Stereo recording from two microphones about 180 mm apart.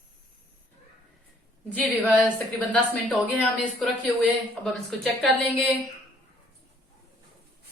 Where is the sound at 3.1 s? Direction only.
10° left (ahead or behind).